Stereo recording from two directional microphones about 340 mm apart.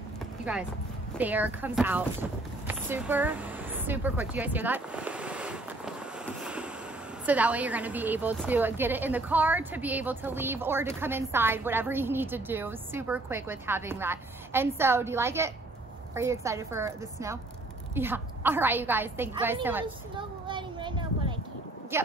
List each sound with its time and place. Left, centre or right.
1.1 s speech: centre
2.7 s a sound: centre
7.2 s a woman's voice: centre